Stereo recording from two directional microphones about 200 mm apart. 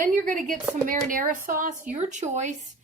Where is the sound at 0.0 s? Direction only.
40° right (ahead or behind).